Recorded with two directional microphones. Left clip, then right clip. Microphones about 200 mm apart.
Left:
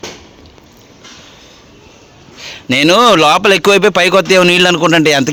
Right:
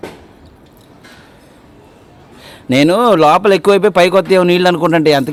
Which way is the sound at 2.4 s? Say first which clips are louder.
Even; 10° right (ahead or behind).